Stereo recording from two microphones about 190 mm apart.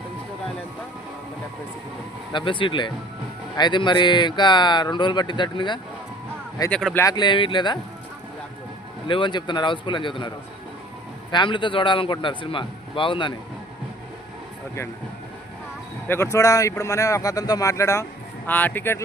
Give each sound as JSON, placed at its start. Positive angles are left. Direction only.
{"t": 2.3, "sound": "speech", "side_deg": 25}
{"t": 6.7, "sound": "speech", "side_deg": 5}
{"t": 7.0, "sound": "speech", "side_deg": 20}
{"t": 9.0, "sound": "speech", "side_deg": 25}
{"t": 16.0, "sound": "speech", "side_deg": 15}